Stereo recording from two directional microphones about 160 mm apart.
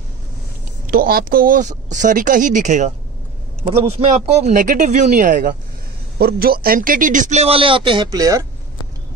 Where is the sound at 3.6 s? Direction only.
40° right (ahead or behind); by 5.5 s 60° right (ahead or behind).